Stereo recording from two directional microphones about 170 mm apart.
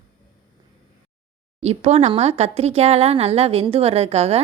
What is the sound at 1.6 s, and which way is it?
Speech, 40° right (ahead or behind).